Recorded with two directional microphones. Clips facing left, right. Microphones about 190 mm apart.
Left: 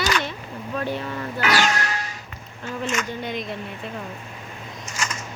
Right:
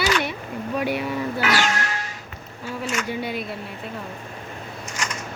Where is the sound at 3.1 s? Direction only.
5° right (ahead or behind).